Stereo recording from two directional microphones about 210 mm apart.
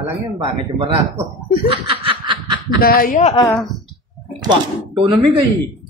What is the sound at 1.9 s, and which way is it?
Snicker, 25° right (ahead or behind).